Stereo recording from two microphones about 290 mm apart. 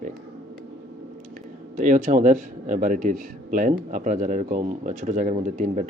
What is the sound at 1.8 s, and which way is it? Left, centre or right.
A man's voice, right.